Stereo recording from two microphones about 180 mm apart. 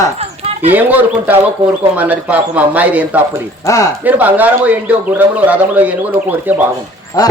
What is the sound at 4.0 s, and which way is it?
Speech, 10° right (ahead or behind).